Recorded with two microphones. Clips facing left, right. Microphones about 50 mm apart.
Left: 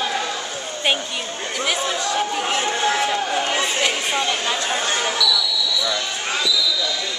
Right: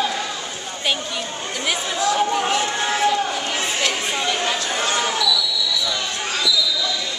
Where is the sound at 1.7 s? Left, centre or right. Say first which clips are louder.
Right 2 dB; centre.